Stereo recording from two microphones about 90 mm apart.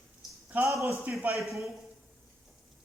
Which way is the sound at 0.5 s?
30° right (ahead or behind).